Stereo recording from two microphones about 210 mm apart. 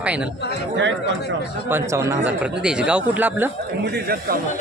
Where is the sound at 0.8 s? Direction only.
60° right (ahead or behind).